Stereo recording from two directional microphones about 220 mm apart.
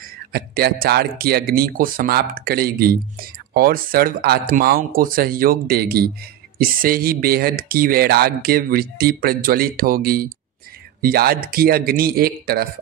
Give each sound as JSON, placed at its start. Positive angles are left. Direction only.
{"t": 0.3, "sound": "speech", "side_deg": -45}